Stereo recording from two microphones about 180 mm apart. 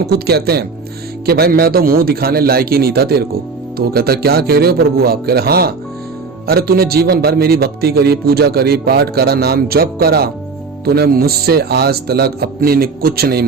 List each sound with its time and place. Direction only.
0.0 s a man's voice: 60° right (ahead or behind)